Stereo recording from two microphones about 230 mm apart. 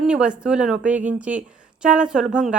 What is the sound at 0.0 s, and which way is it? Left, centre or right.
Speech, centre.